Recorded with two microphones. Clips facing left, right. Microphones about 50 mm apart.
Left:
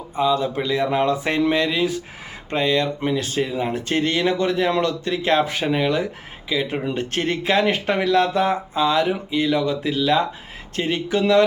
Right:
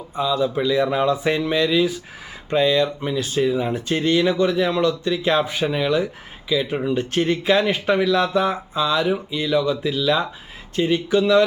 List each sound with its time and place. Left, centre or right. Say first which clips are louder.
0.3 s speech: right 2 dB; left
3.2 s speech: right 3 dB; left
5.6 s speech: even; left